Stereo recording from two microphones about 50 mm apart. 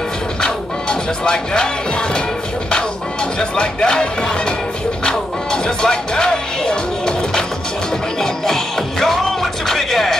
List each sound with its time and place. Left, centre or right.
0.4 s music: centre
3.3 s speech: centre
5.0 s music: centre